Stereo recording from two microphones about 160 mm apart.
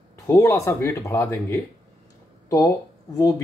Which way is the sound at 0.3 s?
20° left (ahead or behind).